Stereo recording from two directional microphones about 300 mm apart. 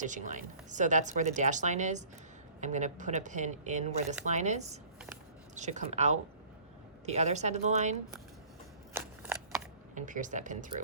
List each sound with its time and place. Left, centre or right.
0.0 s speech: right
8.9 s shuffling cards: centre
9.9 s speech: right